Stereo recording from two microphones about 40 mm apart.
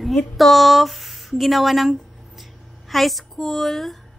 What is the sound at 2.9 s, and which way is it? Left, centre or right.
Speech, centre.